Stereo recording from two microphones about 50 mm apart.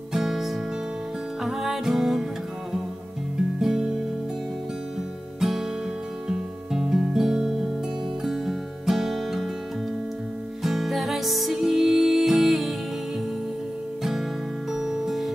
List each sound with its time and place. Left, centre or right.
0.1 s music: centre
3.6 s music: centre
5.4 s music: centre
10.6 s music: centre
14.7 s music: centre